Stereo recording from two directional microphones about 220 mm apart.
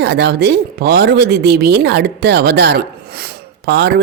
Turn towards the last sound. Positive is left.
turn(degrees=-50)  # may be behind; listen again after turning